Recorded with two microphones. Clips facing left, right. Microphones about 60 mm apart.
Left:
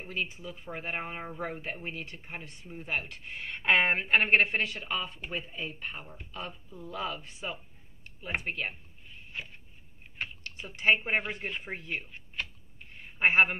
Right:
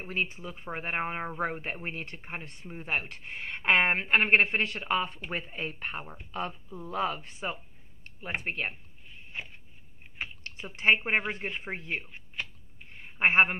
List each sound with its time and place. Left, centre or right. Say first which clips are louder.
0.0 s speech: right 3 dB; right
6.3 s speech: right 6 dB; right
9.3 s a sound: right 1 dB; right
10.2 s typing: even; centre
10.8 s speech: right 1 dB; right
12.4 s a sound: even; centre
13.2 s speech: right 1 dB; right